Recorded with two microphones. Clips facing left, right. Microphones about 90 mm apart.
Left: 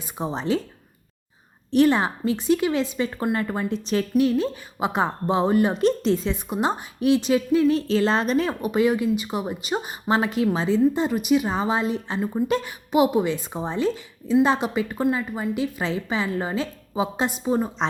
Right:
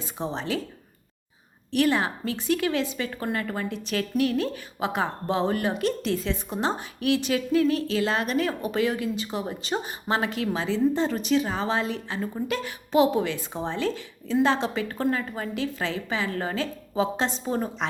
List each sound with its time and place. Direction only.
0.2 s a woman's voice: 20° left (ahead or behind)
1.7 s a woman's voice: 25° left (ahead or behind)